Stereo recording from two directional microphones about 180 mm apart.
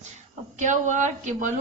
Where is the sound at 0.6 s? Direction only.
45° right (ahead or behind).